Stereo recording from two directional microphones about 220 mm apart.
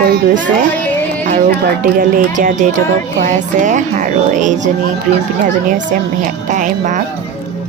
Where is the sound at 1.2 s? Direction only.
35° right (ahead or behind).